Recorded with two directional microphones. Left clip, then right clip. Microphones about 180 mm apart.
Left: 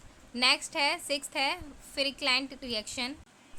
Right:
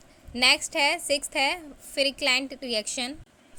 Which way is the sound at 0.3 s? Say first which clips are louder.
Right 5 dB; 20° right (ahead or behind).